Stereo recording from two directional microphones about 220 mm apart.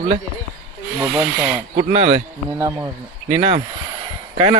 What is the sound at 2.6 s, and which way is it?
Speech, 15° right (ahead or behind).